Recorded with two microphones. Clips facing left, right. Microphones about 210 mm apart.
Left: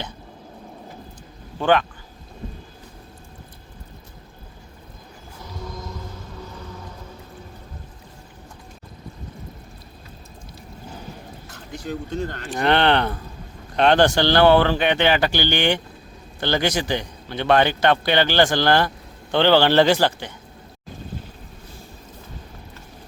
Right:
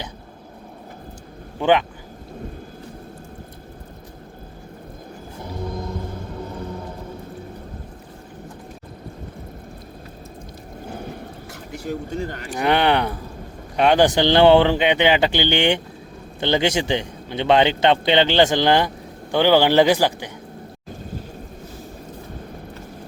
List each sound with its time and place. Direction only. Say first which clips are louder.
1.5 s speech: right 1 dB; 15° right (ahead or behind)
5.4 s vehicle: right 6 dB; 55° right (ahead or behind)
11.7 s a man's voice: right 1 dB; 10° right (ahead or behind)